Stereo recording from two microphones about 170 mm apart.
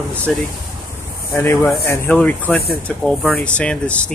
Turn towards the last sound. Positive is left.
turn(degrees=5)  # may be behind; listen again after turning